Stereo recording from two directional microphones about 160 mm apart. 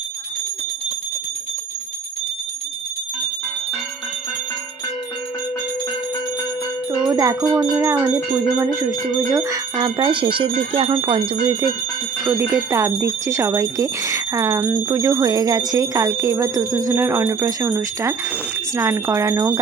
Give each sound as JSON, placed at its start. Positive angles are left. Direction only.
{"t": 7.1, "sound": "speech", "side_deg": -20}
{"t": 12.4, "sound": "speech", "side_deg": -15}